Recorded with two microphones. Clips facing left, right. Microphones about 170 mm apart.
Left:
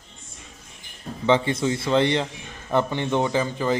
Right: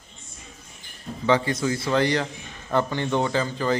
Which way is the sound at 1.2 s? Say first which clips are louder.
Left 1 dB; 25° left (ahead or behind).